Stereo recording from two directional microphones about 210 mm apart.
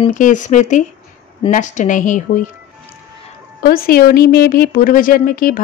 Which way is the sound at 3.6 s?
45° left (ahead or behind).